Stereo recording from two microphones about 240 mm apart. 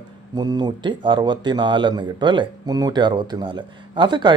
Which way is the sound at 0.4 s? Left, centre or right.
Centre.